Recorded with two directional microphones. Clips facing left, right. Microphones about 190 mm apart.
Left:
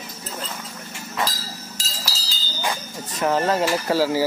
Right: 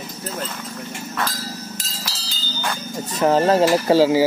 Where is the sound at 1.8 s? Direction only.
55° right (ahead or behind).